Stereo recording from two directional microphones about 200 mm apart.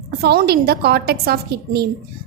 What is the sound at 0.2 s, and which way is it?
A woman's voice, 50° right (ahead or behind).